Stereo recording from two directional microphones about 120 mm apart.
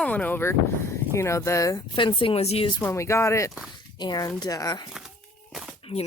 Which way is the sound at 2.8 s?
25° left (ahead or behind).